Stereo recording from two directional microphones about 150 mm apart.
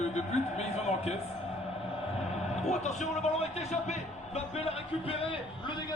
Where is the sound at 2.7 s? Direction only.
50° left (ahead or behind); by 5.9 s 35° left (ahead or behind).